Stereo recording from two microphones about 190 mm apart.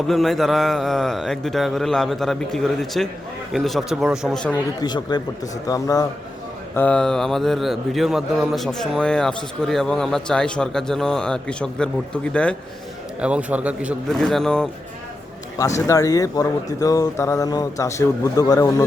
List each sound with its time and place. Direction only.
0.1 s a man's voice: centre (ahead or behind)
4.8 s speech: 20° left (ahead or behind)
6.7 s a man's voice: 5° left (ahead or behind)
13.2 s a man's voice: 5° right (ahead or behind)
15.9 s speech: 20° left (ahead or behind)